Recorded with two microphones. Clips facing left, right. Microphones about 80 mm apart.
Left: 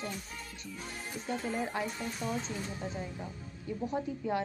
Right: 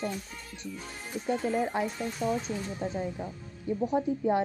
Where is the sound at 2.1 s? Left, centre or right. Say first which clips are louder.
Right 8 dB; centre.